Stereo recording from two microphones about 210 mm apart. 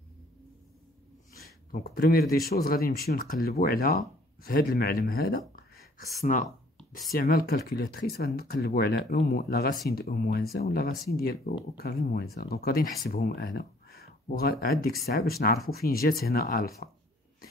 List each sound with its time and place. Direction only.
1.4 s speech: 45° left (ahead or behind)
5.6 s a sound: 45° left (ahead or behind)
7.1 s speech: 45° left (ahead or behind)